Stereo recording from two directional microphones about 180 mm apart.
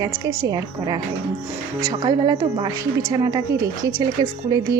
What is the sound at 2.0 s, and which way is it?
A woman's voice, 20° right (ahead or behind).